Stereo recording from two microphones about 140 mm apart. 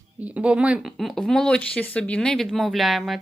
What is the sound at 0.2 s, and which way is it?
Speech, 10° right (ahead or behind).